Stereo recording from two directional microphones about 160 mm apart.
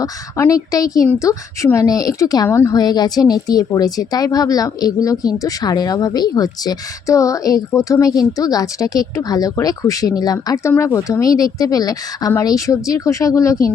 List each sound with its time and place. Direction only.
0.0 s speech: 20° left (ahead or behind)